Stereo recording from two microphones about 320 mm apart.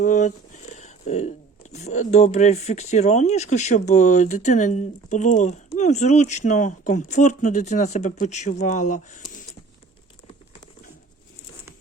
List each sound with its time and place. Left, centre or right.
0.0 s speech: left